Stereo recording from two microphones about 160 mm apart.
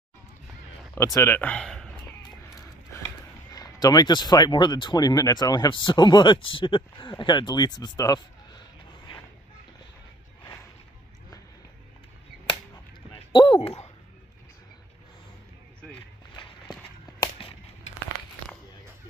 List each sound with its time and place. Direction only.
0.9 s speech: 20° left (ahead or behind); by 1.9 s 5° left (ahead or behind)
3.5 s speech: 25° left (ahead or behind)
12.4 s finger snapping: 30° left (ahead or behind)
15.9 s a sound: 30° left (ahead or behind)